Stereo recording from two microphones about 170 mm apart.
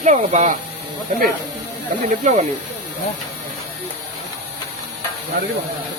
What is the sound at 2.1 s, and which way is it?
Speech, 45° right (ahead or behind).